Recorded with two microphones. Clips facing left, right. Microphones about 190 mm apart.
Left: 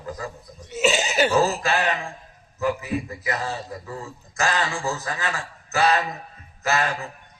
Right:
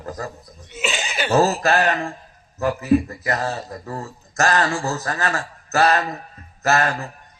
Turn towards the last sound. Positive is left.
turn(degrees=-45)  # may be behind; listen again after turning